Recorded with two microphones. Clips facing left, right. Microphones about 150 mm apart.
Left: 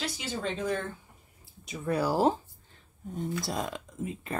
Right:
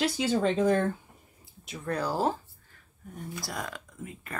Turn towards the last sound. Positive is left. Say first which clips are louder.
# left 6 dB
turn(degrees=20)  # may be behind; listen again after turning